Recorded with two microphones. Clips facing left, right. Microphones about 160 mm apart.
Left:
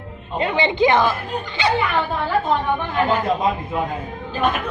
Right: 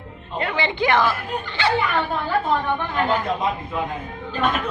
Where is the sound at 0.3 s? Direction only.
20° left (ahead or behind).